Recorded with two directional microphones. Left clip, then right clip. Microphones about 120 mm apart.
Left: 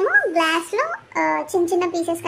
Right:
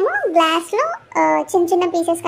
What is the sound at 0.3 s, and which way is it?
A child's voice, 20° right (ahead or behind).